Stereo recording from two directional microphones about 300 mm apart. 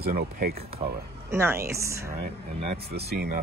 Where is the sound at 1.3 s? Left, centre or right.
Centre.